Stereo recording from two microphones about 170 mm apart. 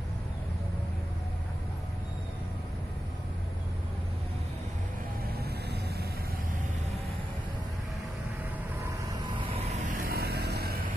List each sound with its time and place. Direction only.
5.4 s vehicle: 70° right (ahead or behind)
9.4 s vehicle: 35° right (ahead or behind); by 10.9 s 70° right (ahead or behind)